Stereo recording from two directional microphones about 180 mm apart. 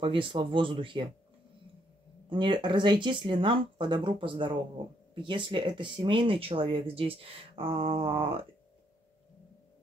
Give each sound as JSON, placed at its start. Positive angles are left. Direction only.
{"t": 0.0, "sound": "speech", "side_deg": -30}
{"t": 2.2, "sound": "speech", "side_deg": -25}